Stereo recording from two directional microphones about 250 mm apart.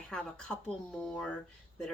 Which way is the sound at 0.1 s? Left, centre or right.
Centre.